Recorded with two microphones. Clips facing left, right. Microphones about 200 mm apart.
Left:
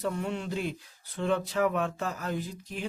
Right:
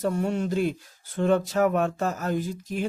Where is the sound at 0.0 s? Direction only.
45° right (ahead or behind).